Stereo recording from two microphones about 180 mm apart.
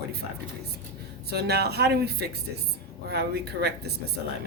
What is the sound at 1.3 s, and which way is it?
Speech, 60° right (ahead or behind).